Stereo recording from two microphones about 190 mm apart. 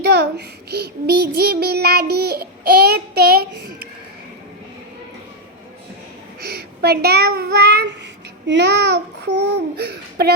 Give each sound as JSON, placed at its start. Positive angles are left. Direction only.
{"t": 0.0, "sound": "child singing", "side_deg": -55}
{"t": 6.4, "sound": "a child's voice", "side_deg": -55}
{"t": 8.4, "sound": "child singing", "side_deg": -65}